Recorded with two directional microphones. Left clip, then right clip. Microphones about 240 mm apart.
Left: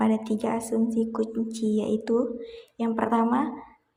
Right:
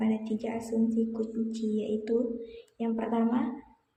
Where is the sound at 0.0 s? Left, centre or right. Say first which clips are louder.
Left 6 dB; centre.